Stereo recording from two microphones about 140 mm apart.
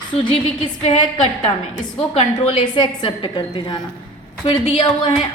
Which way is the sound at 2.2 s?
40° left (ahead or behind).